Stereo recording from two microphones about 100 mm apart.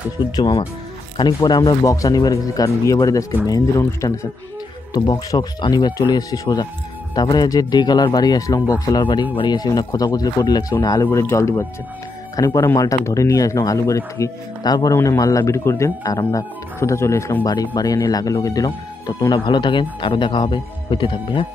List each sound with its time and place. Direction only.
0.2 s speech: 45° left (ahead or behind)
4.9 s speech: 45° left (ahead or behind)
9.0 s speech: 55° left (ahead or behind)
9.6 s speech: 40° left (ahead or behind)
11.1 s speech: 30° left (ahead or behind)
17.4 s speech: 40° left (ahead or behind); by 21.5 s 55° left (ahead or behind)